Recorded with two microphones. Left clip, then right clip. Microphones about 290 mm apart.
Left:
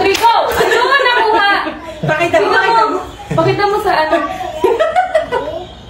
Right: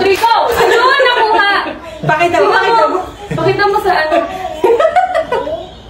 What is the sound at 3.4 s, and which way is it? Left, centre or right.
Speech, centre.